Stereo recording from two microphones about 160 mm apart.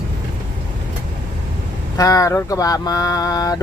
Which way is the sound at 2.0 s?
20° left (ahead or behind).